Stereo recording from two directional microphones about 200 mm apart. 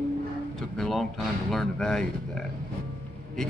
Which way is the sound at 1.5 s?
5° left (ahead or behind).